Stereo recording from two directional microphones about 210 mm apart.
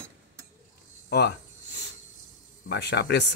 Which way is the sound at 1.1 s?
50° left (ahead or behind).